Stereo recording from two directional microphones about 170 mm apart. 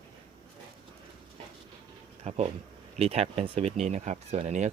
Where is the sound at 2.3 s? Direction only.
40° right (ahead or behind).